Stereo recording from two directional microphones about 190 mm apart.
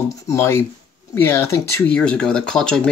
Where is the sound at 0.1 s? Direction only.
15° left (ahead or behind).